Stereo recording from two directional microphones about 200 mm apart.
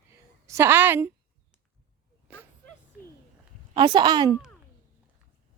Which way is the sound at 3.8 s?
20° right (ahead or behind).